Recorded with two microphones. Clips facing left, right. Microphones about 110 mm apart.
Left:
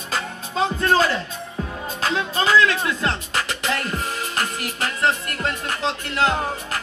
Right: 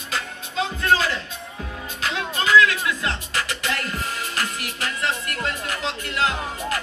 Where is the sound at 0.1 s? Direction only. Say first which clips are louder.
Left 2 dB; 40° left (ahead or behind).